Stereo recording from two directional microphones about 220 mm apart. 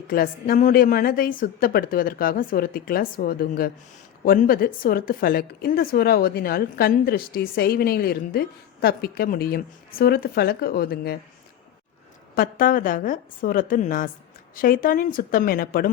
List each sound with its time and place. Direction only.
0.1 s a woman's voice: 40° left (ahead or behind)
12.3 s a woman's voice: 40° left (ahead or behind)